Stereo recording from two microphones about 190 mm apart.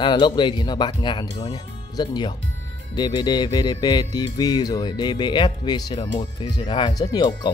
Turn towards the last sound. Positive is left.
turn(degrees=20)  # may be behind; listen again after turning